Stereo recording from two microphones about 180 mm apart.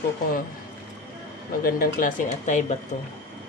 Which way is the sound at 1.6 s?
50° left (ahead or behind).